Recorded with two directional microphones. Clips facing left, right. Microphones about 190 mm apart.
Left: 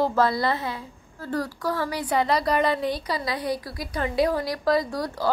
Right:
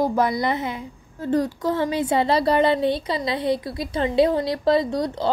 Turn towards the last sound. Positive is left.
turn(degrees=-25)  # may be behind; listen again after turning